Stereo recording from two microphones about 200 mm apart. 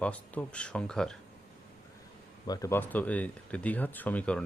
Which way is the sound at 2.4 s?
20° left (ahead or behind).